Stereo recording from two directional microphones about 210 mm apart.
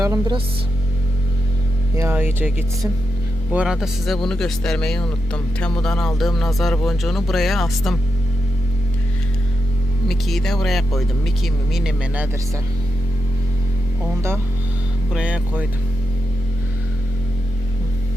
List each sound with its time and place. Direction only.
0.0 s a woman's voice: 20° right (ahead or behind)
2.0 s speech: 10° right (ahead or behind)
10.1 s speech: centre (ahead or behind)
15.1 s speech: 5° right (ahead or behind)